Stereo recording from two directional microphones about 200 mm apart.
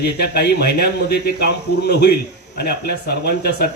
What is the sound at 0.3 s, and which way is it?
Speech, 55° left (ahead or behind).